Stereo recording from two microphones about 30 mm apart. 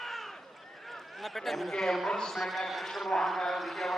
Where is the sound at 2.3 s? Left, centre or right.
Centre.